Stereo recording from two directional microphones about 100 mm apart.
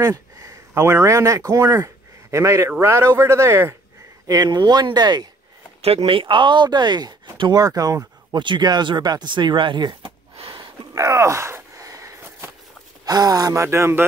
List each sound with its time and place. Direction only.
0.0 s speech: 35° right (ahead or behind)
4.3 s speech: 45° right (ahead or behind)
5.8 s speech: 90° right; by 10.1 s 50° right (ahead or behind)
10.5 s a sound: 45° right (ahead or behind)
11.1 s a sound: 30° right (ahead or behind)
13.0 s speech: 40° right (ahead or behind)